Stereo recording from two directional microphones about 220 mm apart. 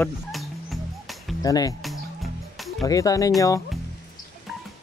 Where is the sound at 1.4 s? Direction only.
15° left (ahead or behind).